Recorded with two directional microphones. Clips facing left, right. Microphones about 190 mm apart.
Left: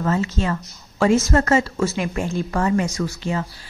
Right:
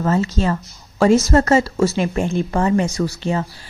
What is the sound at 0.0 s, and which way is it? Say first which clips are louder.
A woman's voice: right 3 dB; 35° right (ahead or behind).